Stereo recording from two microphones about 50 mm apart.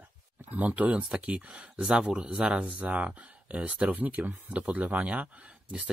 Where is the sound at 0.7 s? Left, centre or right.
Right.